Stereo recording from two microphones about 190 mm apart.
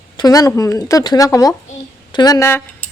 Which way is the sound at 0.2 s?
20° left (ahead or behind).